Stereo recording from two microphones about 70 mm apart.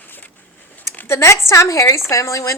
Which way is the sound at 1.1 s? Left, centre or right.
Left.